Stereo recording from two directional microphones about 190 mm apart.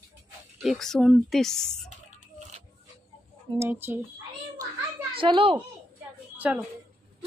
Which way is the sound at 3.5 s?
10° right (ahead or behind).